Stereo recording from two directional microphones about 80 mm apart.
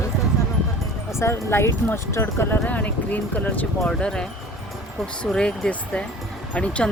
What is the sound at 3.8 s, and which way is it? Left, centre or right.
Speech, centre.